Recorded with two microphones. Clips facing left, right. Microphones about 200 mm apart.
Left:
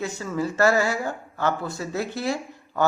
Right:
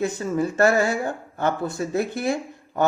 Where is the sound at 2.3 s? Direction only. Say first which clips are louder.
Right 2 dB; 20° right (ahead or behind).